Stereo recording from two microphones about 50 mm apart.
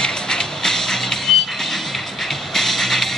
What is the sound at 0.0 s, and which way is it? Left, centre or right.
Music, centre.